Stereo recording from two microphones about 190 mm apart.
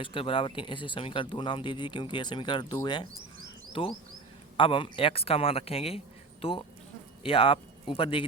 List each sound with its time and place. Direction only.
0.0 s speech: 30° left (ahead or behind)